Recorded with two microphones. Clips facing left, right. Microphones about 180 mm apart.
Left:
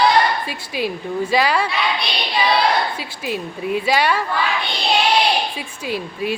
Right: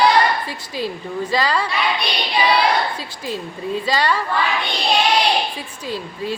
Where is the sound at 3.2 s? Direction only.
15° left (ahead or behind).